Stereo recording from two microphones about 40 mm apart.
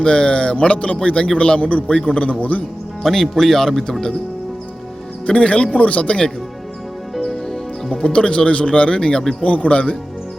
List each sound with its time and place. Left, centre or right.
0.0 s a man's voice: left
3.0 s speech: centre
5.2 s speech: left
7.9 s a man's voice: left
9.4 s speech: left